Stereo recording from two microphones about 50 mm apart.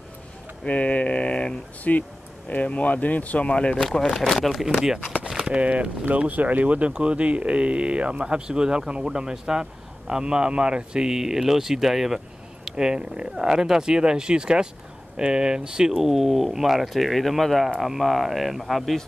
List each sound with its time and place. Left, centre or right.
0.7 s speech: left
3.8 s speech: centre
4.7 s speech: centre
5.4 s speech: right
15.9 s speech: centre